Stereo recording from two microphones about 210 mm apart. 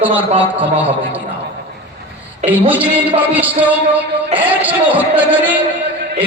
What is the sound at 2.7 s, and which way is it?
Speech, 5° right (ahead or behind).